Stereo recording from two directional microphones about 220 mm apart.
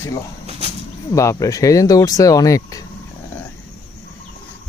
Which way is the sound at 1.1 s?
15° left (ahead or behind).